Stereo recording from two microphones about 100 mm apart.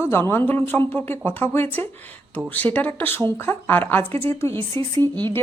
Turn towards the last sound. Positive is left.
turn(degrees=-45)  # may be behind; listen again after turning